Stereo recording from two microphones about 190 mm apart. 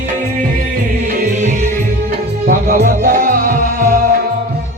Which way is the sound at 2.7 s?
50° right (ahead or behind).